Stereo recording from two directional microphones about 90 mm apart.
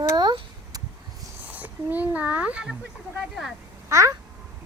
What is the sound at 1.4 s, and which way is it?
Speech, 15° right (ahead or behind).